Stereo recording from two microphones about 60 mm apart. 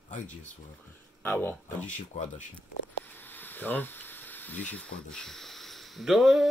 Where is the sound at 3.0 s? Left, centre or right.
Left; by 6.4 s centre.